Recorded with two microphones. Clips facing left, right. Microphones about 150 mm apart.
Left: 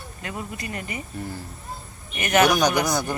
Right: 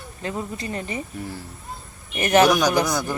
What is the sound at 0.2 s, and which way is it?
Speech, 30° right (ahead or behind).